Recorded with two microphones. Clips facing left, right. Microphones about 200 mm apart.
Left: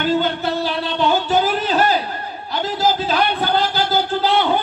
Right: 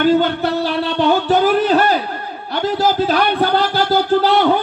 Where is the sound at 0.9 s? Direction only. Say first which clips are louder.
Right 3 dB; 60° right (ahead or behind).